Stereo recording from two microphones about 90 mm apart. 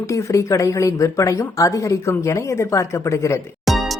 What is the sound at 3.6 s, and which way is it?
Music, centre (ahead or behind).